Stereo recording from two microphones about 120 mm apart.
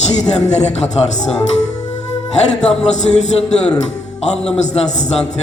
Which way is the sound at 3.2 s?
65° left (ahead or behind).